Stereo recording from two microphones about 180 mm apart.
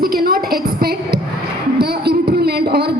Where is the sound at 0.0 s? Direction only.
55° right (ahead or behind).